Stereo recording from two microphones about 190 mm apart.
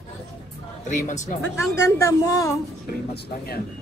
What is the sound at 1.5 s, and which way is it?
A woman's voice, 15° left (ahead or behind).